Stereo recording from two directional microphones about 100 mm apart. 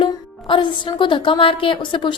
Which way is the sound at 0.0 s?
55° left (ahead or behind).